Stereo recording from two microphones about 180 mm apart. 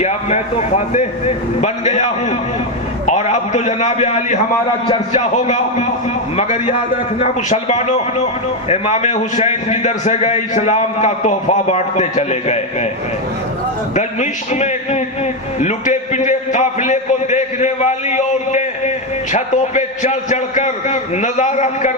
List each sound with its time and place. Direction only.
0.0 s a man's voice: 40° left (ahead or behind)
1.6 s a man's voice: 40° left (ahead or behind)
13.9 s a man's voice: 40° left (ahead or behind)